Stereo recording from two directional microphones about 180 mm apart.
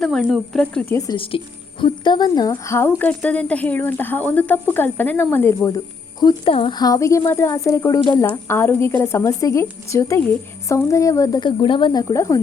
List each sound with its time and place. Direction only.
0.0 s speech: centre (ahead or behind)
0.9 s a woman's voice: 25° left (ahead or behind)
12.1 s speech: 15° left (ahead or behind)